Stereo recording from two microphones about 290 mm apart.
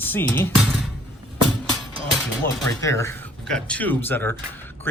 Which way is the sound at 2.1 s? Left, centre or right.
Centre.